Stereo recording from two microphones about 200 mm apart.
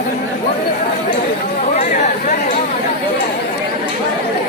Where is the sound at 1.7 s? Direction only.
40° left (ahead or behind).